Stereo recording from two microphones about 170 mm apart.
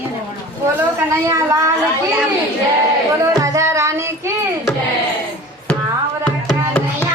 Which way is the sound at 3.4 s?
20° right (ahead or behind).